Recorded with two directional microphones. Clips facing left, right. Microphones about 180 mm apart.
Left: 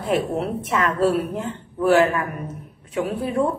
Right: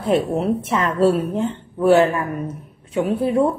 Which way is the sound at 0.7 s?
25° right (ahead or behind).